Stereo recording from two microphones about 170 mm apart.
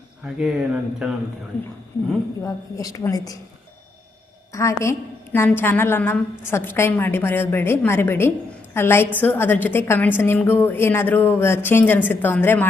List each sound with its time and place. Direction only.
0.3 s speech: 5° right (ahead or behind)
2.4 s a woman's voice: 20° left (ahead or behind)
4.5 s a woman's voice: 15° left (ahead or behind)